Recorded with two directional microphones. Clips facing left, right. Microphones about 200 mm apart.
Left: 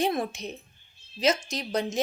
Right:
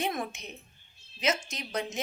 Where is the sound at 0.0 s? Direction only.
35° left (ahead or behind).